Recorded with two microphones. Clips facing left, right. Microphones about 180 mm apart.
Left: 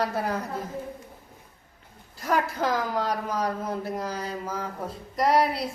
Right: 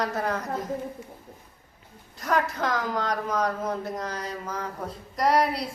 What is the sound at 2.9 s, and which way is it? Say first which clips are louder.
A woman's voice: even; 10° left (ahead or behind).